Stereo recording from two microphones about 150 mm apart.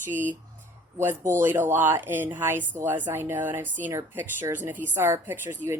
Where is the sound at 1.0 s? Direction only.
15° right (ahead or behind).